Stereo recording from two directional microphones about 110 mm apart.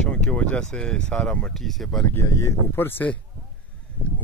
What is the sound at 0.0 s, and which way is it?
Speech, 10° left (ahead or behind).